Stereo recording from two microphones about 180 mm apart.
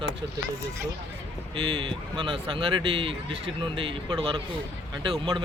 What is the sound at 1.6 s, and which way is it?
Speech, 30° right (ahead or behind).